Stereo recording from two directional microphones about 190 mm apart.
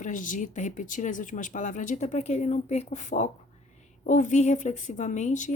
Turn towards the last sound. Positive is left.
turn(degrees=40)  # may be behind; listen again after turning